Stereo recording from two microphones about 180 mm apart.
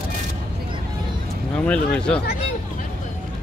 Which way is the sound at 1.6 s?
5° left (ahead or behind).